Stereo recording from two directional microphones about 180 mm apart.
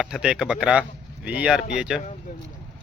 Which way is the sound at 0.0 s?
5° right (ahead or behind).